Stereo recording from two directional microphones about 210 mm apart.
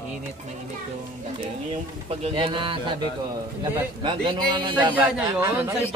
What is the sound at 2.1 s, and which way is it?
Speech, 30° right (ahead or behind).